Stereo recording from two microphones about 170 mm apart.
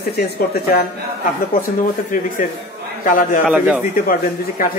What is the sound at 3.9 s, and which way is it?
Speech, 55° left (ahead or behind).